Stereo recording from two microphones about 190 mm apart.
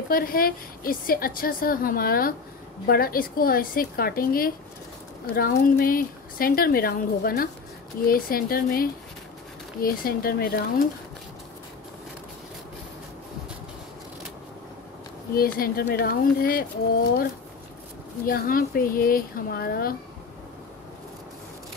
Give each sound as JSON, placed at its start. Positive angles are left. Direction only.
{"t": 0.1, "sound": "a woman's voice", "side_deg": 50}
{"t": 15.3, "sound": "a woman's voice", "side_deg": 50}
{"t": 18.2, "sound": "a woman's voice", "side_deg": 50}